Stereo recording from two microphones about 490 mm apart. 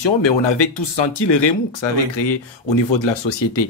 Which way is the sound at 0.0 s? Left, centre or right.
Left.